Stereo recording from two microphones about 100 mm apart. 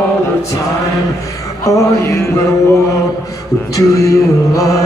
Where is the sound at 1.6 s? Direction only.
35° left (ahead or behind).